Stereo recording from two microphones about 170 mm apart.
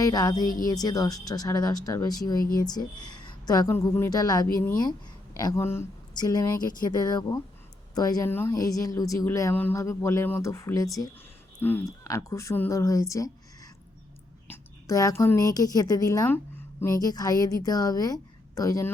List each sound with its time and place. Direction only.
0.0 s a woman's voice: 20° left (ahead or behind)
14.4 s a woman's voice: 15° left (ahead or behind)